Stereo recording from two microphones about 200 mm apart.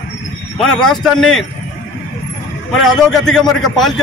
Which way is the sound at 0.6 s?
5° left (ahead or behind).